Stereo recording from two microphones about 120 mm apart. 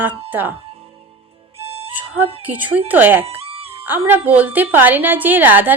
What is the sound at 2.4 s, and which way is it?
Speech, 15° right (ahead or behind).